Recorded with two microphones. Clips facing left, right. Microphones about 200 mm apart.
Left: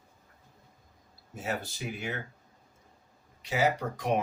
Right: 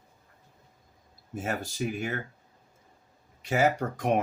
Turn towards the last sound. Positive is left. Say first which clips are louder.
# right 3 dB
turn(degrees=-50)  # may be behind; listen again after turning